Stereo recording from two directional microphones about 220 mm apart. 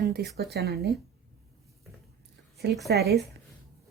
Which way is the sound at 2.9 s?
45° right (ahead or behind).